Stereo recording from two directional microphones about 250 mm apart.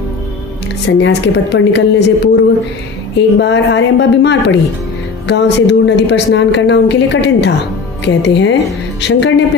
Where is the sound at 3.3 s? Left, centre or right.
Left.